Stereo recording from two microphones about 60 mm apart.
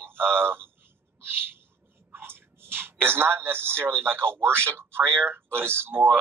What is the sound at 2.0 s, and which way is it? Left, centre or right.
Speech, right.